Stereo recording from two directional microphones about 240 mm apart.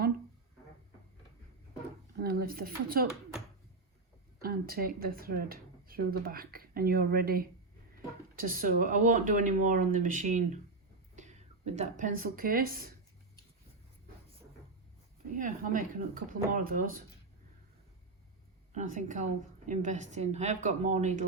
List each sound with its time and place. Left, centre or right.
2.1 s speech: right
4.4 s speech: right
15.4 s speech: right
18.7 s a woman's voice: right